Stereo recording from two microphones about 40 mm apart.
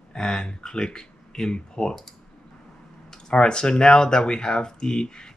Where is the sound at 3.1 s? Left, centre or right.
Centre.